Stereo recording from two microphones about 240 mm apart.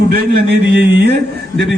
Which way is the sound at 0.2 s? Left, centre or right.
Right.